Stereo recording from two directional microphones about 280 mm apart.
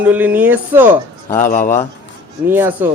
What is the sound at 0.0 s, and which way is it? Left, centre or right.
Speech, centre.